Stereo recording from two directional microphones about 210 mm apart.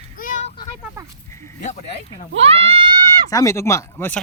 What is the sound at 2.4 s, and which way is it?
Speech, 30° right (ahead or behind).